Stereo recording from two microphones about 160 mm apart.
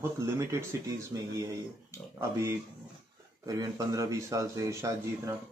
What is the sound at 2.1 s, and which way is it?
Speech, 20° right (ahead or behind).